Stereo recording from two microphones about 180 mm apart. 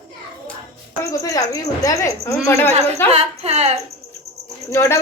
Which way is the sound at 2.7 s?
35° right (ahead or behind).